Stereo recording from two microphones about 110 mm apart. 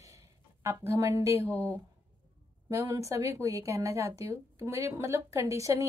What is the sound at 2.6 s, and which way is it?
A woman's voice, 30° right (ahead or behind).